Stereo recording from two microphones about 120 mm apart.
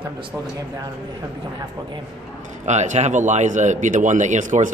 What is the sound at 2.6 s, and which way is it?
Speech, 75° right (ahead or behind).